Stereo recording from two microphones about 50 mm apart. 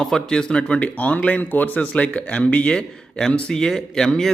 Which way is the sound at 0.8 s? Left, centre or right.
Left.